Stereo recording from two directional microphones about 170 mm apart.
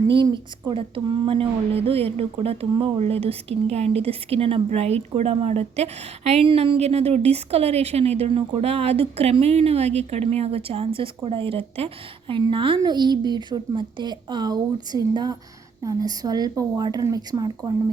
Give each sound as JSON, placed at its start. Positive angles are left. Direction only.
{"t": 0.1, "sound": "a woman's voice", "side_deg": -25}